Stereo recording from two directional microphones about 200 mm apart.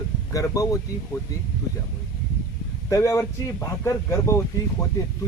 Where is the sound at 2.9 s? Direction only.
15° left (ahead or behind).